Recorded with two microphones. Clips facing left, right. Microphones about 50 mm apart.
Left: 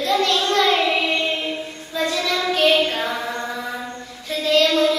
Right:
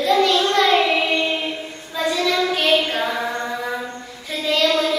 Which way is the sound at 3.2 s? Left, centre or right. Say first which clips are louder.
Right 2 dB; right.